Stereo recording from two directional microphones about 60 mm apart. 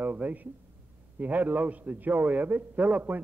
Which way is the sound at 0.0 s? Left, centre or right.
Right.